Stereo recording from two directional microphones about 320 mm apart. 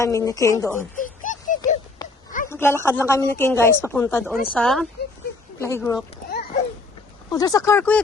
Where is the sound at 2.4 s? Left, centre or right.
Centre.